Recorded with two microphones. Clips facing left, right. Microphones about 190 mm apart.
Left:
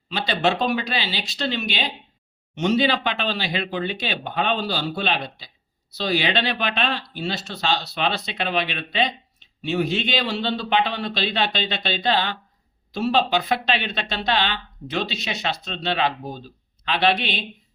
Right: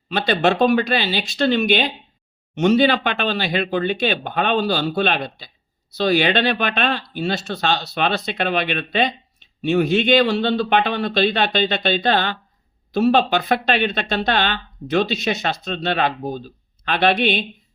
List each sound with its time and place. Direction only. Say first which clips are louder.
0.1 s speech: right 4 dB; 55° right (ahead or behind)